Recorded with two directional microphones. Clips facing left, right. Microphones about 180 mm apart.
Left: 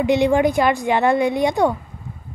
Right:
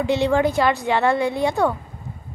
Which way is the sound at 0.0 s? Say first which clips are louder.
Left 3 dB; 15° left (ahead or behind).